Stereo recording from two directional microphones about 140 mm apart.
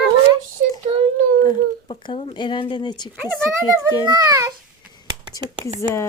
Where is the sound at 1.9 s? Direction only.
45° left (ahead or behind).